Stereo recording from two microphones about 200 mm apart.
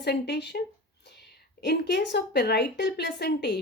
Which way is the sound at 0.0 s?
55° left (ahead or behind).